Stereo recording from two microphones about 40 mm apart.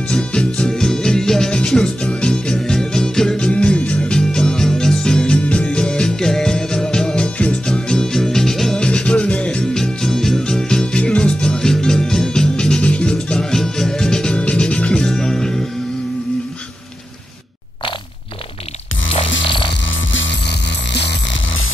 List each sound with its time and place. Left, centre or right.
0.1 s music: left
5.4 s music: left
7.2 s music: left
7.6 s music: centre
8.7 s music: left
12.8 s music: left
15.0 s music: centre